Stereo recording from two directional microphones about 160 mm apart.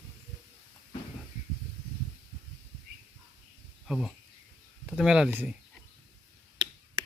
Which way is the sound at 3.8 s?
Centre (ahead or behind).